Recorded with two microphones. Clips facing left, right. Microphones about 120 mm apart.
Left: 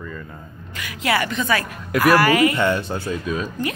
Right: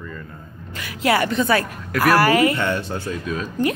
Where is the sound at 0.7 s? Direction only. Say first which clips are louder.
Right 2 dB; 40° right (ahead or behind).